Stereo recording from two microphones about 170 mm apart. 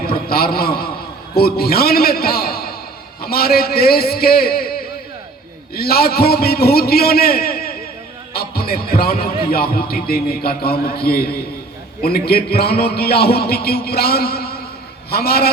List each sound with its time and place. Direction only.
0.0 s a man's voice: 60° left (ahead or behind)